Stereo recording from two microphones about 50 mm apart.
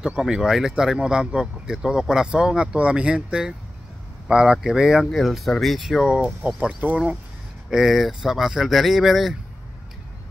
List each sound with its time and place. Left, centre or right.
0.2 s speech: centre
5.1 s speech: centre
6.1 s speech: right
7.7 s speech: centre